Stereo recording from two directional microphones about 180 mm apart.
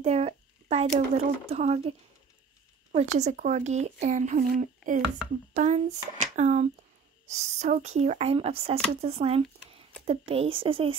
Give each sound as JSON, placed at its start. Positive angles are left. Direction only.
{"t": 0.0, "sound": "speech", "side_deg": -35}